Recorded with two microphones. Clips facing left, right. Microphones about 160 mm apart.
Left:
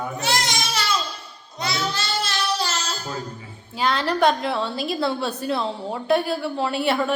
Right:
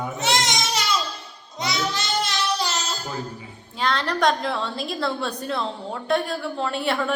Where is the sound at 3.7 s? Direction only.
5° left (ahead or behind).